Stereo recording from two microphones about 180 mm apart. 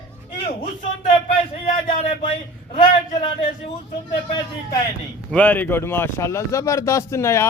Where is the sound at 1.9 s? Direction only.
40° left (ahead or behind).